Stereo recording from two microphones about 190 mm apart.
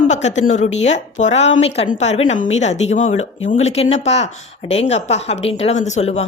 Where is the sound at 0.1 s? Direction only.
35° left (ahead or behind).